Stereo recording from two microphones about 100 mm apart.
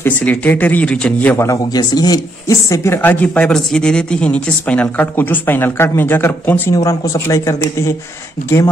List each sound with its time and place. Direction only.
0.0 s speech: 15° left (ahead or behind)
1.3 s speech: 30° left (ahead or behind)
1.8 s speech: 40° left (ahead or behind); by 6.6 s 20° left (ahead or behind)
6.7 s speech: 35° left (ahead or behind)